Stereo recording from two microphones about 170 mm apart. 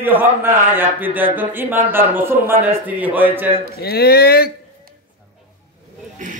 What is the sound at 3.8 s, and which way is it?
Speech, 70° left (ahead or behind).